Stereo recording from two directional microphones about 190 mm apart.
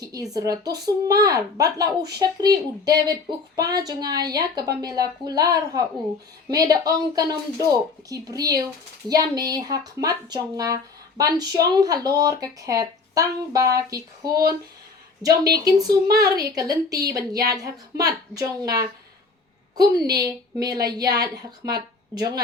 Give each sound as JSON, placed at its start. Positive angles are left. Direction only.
{"t": 0.0, "sound": "speech", "side_deg": -20}